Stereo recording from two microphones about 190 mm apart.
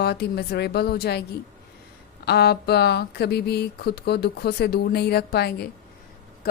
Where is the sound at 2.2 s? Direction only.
60° left (ahead or behind).